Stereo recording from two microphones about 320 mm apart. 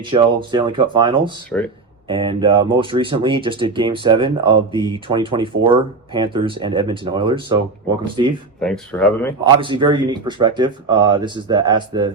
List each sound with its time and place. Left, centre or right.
0.1 s speech: centre
8.6 s speech: centre
9.4 s speech: centre